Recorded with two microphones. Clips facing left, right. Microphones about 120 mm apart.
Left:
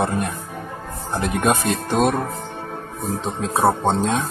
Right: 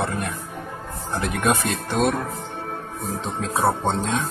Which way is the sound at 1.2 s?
35° left (ahead or behind).